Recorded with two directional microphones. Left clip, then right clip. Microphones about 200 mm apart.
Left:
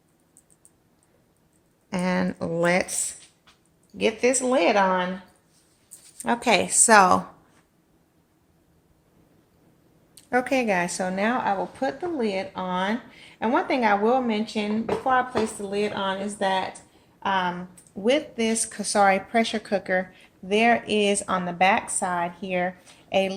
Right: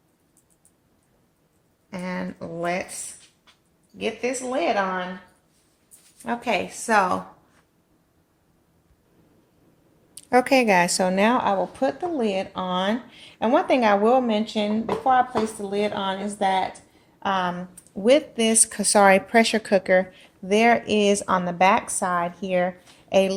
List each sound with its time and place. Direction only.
1.9 s speech: 55° left (ahead or behind)
3.9 s a woman's voice: 60° left (ahead or behind)
6.2 s a woman's voice: 60° left (ahead or behind)
10.2 s a woman's voice: 30° right (ahead or behind)